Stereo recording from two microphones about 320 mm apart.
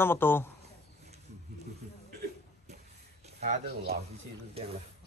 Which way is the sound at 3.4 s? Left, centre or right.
Right.